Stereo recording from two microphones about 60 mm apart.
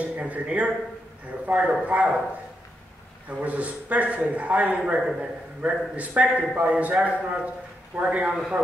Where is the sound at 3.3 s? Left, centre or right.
Right.